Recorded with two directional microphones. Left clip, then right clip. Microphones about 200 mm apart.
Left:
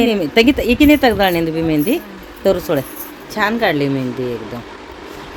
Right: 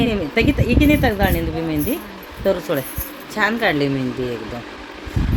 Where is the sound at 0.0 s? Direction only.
20° left (ahead or behind).